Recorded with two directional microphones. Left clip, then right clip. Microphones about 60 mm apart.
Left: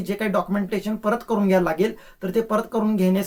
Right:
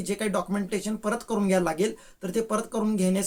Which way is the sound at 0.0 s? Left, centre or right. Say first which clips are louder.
Left 5 dB; right.